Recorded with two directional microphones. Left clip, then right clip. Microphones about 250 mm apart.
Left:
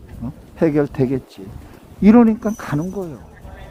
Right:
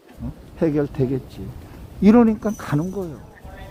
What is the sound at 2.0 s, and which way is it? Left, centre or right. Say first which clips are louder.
A man's voice: left 2 dB; centre.